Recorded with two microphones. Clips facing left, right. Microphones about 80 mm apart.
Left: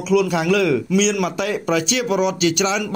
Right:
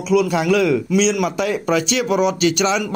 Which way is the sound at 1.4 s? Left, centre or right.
Right.